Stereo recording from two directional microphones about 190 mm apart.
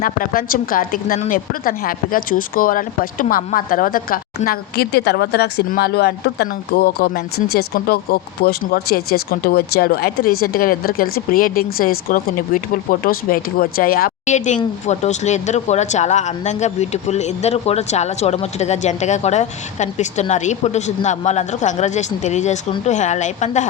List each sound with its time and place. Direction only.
0.0 s a woman's voice: 50° left (ahead or behind)
14.3 s speech: 40° left (ahead or behind)